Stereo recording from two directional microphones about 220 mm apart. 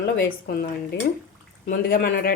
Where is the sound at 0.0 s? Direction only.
45° left (ahead or behind).